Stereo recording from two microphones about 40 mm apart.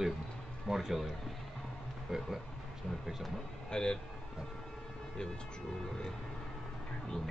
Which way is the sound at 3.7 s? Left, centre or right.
Left.